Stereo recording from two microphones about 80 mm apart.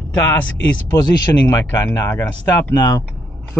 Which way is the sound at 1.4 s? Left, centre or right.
Left.